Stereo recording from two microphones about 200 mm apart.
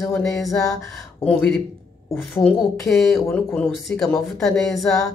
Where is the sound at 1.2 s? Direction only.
5° left (ahead or behind).